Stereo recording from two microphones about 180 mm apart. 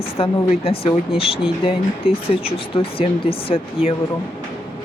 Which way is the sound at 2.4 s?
30° left (ahead or behind).